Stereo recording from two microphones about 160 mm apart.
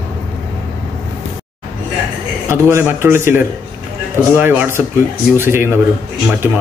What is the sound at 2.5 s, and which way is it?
Speech, 15° right (ahead or behind).